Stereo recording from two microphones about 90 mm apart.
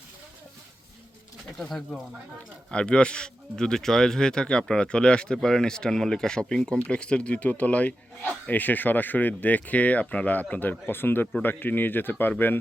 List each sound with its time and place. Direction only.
1.5 s speech: 5° left (ahead or behind); by 12.3 s 20° left (ahead or behind)